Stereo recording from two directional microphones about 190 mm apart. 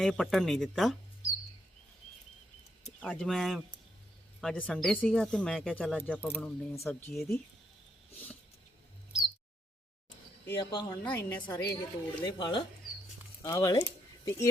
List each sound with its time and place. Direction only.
0.0 s speech: centre (ahead or behind)
3.0 s speech: 5° left (ahead or behind)
7.1 s speech: centre (ahead or behind)
10.6 s a woman's voice: 25° left (ahead or behind)